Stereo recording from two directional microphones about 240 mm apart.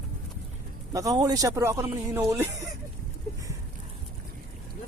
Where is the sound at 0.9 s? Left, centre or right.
Centre.